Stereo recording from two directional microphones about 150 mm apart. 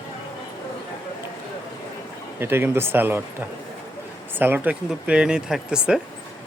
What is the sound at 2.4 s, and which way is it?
Speech, 15° right (ahead or behind).